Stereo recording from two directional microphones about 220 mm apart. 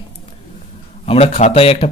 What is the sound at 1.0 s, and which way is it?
Speech, 25° left (ahead or behind).